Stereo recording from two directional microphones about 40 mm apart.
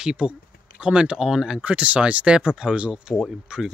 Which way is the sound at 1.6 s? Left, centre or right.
Right.